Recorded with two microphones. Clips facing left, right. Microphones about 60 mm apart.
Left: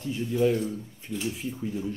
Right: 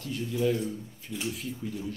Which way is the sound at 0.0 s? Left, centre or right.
Left.